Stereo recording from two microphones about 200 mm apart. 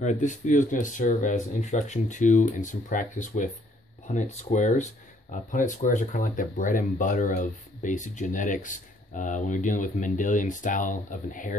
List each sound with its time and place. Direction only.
0.0 s speech: 40° left (ahead or behind)